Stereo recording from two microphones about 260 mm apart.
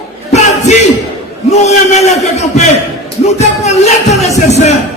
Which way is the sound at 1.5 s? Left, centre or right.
Left.